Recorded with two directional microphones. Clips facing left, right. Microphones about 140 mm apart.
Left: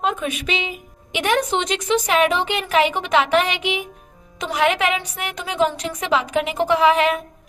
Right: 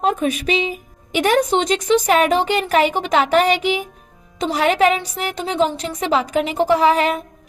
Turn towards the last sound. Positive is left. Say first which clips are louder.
# right 1 dB
turn(degrees=-35)  # may be behind; listen again after turning